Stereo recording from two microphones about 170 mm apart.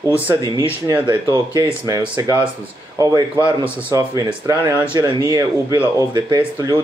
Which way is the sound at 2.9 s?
20° right (ahead or behind).